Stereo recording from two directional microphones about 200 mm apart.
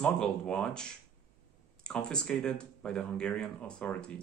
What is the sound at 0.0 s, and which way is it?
Speech, 5° left (ahead or behind).